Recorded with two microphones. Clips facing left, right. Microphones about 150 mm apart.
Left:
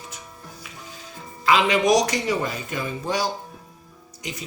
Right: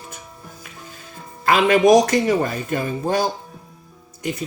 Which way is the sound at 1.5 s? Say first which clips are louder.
Right 5 dB; 50° right (ahead or behind).